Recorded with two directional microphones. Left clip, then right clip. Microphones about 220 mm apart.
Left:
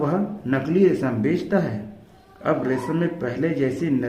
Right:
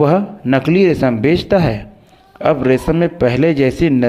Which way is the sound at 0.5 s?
40° right (ahead or behind).